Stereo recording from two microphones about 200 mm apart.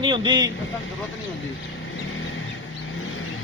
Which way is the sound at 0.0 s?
20° right (ahead or behind).